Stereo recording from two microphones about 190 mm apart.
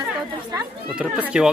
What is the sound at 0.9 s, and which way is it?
Speech, 5° right (ahead or behind).